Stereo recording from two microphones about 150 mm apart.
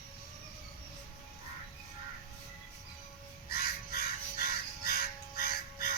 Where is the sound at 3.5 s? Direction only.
90° left.